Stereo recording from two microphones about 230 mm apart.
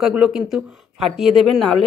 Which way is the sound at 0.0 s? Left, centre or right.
Centre.